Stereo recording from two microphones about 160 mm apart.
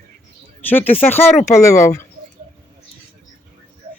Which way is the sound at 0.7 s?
10° left (ahead or behind).